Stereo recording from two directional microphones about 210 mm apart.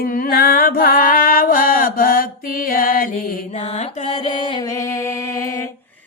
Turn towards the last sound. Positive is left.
turn(degrees=15)  # may be behind; listen again after turning